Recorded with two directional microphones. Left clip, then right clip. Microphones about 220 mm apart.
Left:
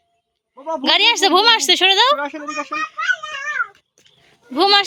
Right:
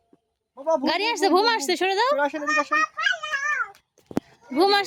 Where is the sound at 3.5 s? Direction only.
15° right (ahead or behind).